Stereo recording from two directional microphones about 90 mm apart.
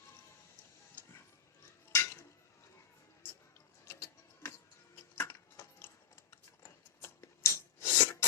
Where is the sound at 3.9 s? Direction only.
35° left (ahead or behind).